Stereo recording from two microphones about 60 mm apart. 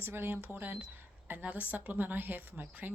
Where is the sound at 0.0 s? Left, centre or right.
Right.